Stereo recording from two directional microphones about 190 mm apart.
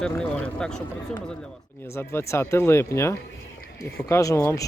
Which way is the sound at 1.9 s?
15° left (ahead or behind).